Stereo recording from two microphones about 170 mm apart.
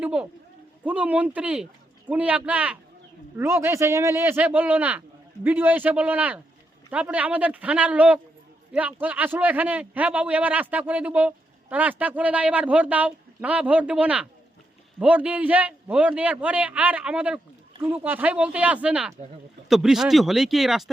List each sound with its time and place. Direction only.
0.0 s a man's voice: 5° right (ahead or behind)